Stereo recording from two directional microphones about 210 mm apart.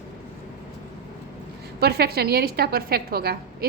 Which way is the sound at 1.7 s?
50° right (ahead or behind).